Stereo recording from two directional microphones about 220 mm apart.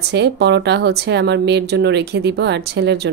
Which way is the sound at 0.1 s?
50° right (ahead or behind).